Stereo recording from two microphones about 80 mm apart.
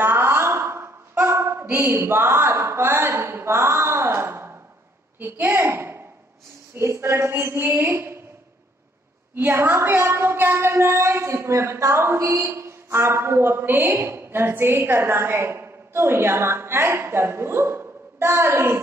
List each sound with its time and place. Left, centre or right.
0.0 s a sound: right
1.2 s a woman's voice: right
9.3 s a woman's voice: right